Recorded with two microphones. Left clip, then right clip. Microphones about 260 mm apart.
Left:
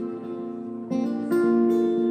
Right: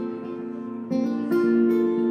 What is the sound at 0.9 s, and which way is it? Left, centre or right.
Music, centre.